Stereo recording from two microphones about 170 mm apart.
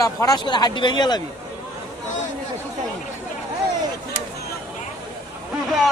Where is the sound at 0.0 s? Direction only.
20° left (ahead or behind).